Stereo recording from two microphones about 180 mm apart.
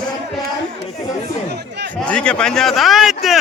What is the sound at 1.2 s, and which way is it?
Chatter, 70° right (ahead or behind).